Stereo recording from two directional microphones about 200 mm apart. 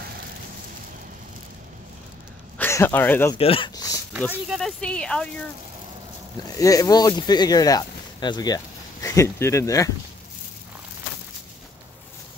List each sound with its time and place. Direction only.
2.5 s speech: 10° left (ahead or behind)
3.3 s speech: 30° left (ahead or behind)
4.5 s speech: centre (ahead or behind)
6.5 s speech: 15° left (ahead or behind)